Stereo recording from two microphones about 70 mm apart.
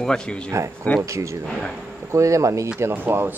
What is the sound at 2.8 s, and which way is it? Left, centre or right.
Speech, right.